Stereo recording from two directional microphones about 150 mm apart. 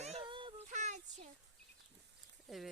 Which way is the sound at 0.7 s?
50° right (ahead or behind).